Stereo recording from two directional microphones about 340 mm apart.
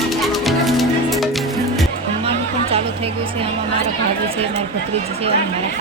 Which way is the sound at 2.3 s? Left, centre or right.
Centre.